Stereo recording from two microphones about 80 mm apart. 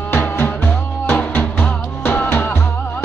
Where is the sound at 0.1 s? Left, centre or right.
Left.